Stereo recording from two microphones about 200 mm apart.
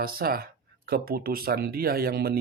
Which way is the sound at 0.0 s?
50° right (ahead or behind).